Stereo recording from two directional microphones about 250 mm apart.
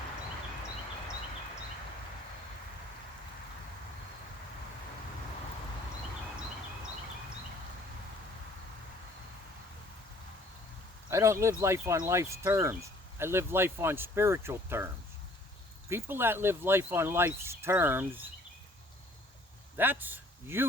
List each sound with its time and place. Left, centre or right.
11.1 s speech: centre
15.9 s speech: centre
19.7 s speech: centre